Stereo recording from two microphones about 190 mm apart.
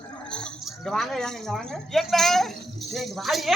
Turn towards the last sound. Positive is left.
turn(degrees=0)  # may be behind; listen again after turning